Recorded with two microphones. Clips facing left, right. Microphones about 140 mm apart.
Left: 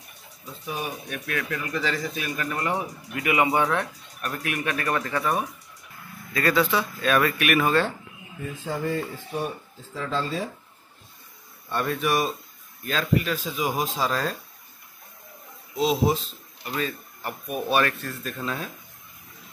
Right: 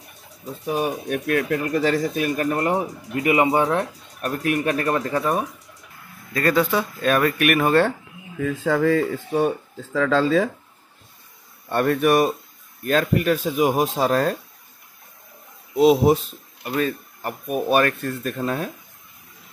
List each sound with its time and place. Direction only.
0.7 s speech: 45° right (ahead or behind)
6.3 s speech: 45° right (ahead or behind)
8.4 s speech: 90° right
11.7 s speech: 55° right (ahead or behind)
15.8 s speech: 55° right (ahead or behind)
16.6 s speech: 45° right (ahead or behind)